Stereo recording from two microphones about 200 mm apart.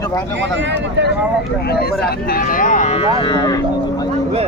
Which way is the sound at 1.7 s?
50° left (ahead or behind).